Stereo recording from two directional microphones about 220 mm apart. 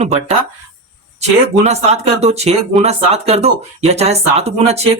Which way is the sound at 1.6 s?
30° right (ahead or behind).